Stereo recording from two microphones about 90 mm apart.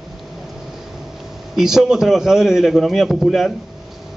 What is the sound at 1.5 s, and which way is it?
Speech, 5° right (ahead or behind).